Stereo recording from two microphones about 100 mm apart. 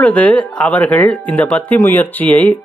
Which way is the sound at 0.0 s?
15° left (ahead or behind).